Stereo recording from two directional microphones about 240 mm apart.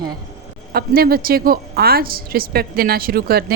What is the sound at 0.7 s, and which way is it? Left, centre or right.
A woman's voice, right.